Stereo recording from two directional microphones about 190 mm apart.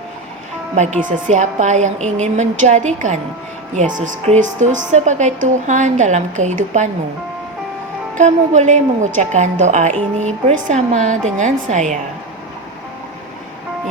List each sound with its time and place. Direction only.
1.0 s a woman's voice: 40° right (ahead or behind)
8.2 s a woman's voice: 40° right (ahead or behind)